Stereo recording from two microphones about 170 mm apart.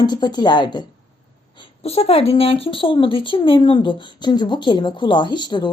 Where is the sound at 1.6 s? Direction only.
35° left (ahead or behind).